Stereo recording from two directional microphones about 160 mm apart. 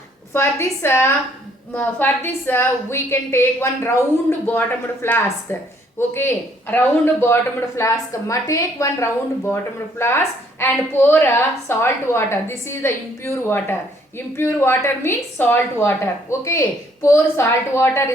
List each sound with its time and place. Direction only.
0.3 s a woman's voice: 15° left (ahead or behind)